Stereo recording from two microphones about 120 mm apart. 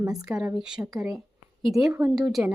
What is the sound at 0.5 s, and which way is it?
Speech, 5° right (ahead or behind).